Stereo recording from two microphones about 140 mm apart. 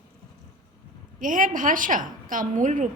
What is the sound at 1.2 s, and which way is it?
A woman's voice, 70° right (ahead or behind).